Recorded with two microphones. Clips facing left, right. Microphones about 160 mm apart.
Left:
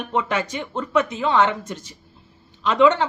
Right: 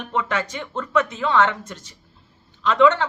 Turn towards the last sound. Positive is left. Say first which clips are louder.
# even
turn(degrees=15)  # may be behind; listen again after turning